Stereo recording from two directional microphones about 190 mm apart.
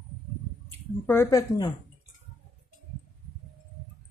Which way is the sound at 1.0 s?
10° left (ahead or behind).